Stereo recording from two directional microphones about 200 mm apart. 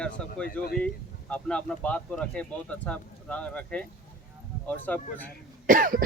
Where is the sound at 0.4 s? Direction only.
50° left (ahead or behind).